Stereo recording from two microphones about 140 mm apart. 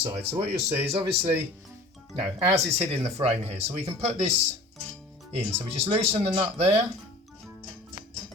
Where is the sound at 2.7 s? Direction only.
45° right (ahead or behind).